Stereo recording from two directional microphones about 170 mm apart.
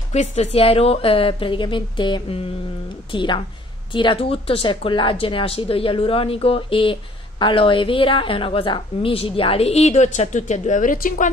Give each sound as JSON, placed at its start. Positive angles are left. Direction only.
{"t": 0.1, "sound": "a woman's voice", "side_deg": 45}